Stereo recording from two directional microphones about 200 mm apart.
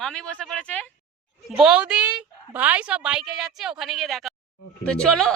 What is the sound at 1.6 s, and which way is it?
A woman's voice, 5° right (ahead or behind).